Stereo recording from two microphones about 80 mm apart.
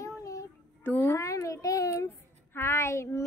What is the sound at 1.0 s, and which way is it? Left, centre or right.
A child's voice, left.